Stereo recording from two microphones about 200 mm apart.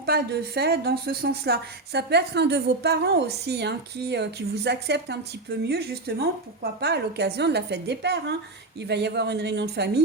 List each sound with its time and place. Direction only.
0.0 s a woman's voice: 55° right (ahead or behind)